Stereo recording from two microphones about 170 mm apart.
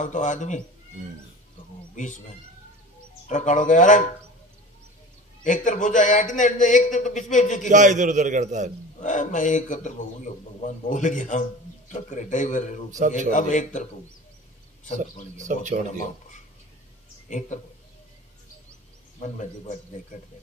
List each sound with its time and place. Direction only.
0.0 s a man's voice: 50° left (ahead or behind)
2.0 s a man's voice: 45° left (ahead or behind)
3.3 s a man's voice: 45° left (ahead or behind)
5.4 s a man's voice: 50° left (ahead or behind)
7.7 s a man's voice: 45° right (ahead or behind)
9.0 s a man's voice: 45° left (ahead or behind)
12.9 s a man's voice: 45° right (ahead or behind)
13.3 s a man's voice: 50° left (ahead or behind)
15.4 s a man's voice: 45° right (ahead or behind)
17.3 s speech: 45° left (ahead or behind)
19.1 s a man's voice: 45° left (ahead or behind)